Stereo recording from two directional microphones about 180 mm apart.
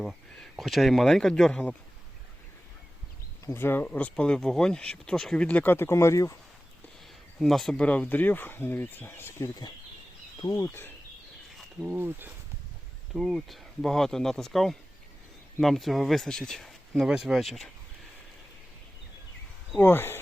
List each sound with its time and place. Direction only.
0.0 s speech: centre (ahead or behind)
3.4 s speech: 10° left (ahead or behind)
7.3 s speech: centre (ahead or behind)
11.8 s speech: 10° right (ahead or behind)
19.7 s speech: 10° left (ahead or behind)